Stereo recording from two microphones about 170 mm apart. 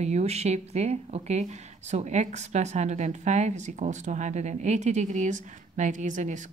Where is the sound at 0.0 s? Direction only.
40° right (ahead or behind).